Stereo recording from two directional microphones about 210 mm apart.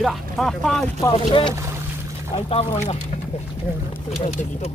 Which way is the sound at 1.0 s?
25° left (ahead or behind).